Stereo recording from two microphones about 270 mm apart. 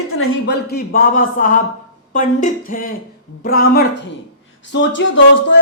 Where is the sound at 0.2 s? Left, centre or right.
Left.